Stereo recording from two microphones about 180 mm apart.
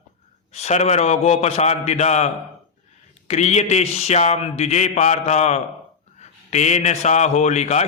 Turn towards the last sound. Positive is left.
turn(degrees=40)  # may be behind; listen again after turning